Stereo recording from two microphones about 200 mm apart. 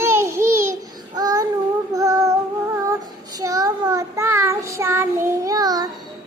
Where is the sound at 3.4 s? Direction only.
15° right (ahead or behind).